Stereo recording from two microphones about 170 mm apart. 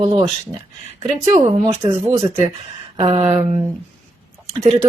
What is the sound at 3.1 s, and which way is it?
Speech, 35° right (ahead or behind).